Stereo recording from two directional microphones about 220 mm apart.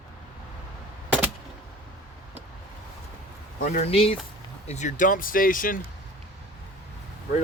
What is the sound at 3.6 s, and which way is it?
Speech, 30° left (ahead or behind).